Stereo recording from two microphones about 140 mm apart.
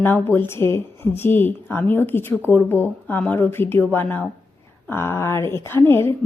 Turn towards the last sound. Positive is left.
turn(degrees=15)  # may be behind; listen again after turning